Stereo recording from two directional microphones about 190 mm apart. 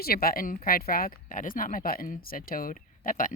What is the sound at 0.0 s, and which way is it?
Speech, 50° left (ahead or behind).